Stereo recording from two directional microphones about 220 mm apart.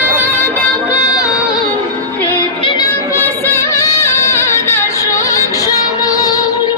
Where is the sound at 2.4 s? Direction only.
20° left (ahead or behind).